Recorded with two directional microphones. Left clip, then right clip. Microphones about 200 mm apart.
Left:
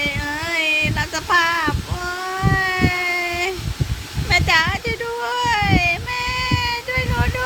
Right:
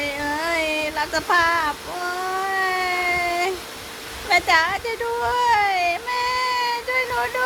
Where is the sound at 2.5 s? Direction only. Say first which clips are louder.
Left 4 dB; 5° right (ahead or behind).